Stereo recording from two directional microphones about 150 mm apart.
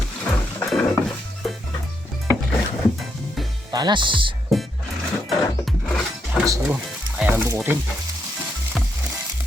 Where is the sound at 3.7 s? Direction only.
30° right (ahead or behind).